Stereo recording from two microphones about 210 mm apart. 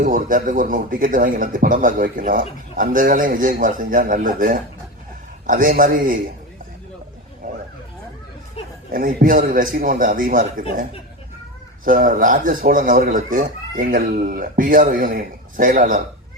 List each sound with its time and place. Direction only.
0.0 s speech: 40° right (ahead or behind)
8.9 s speech: 40° right (ahead or behind)
11.9 s speech: 40° right (ahead or behind)